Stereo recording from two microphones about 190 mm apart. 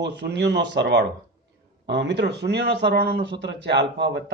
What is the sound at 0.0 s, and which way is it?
Speech, 65° right (ahead or behind).